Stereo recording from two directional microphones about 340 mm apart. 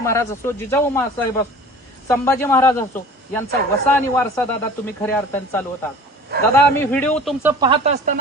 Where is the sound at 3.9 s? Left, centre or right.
Centre.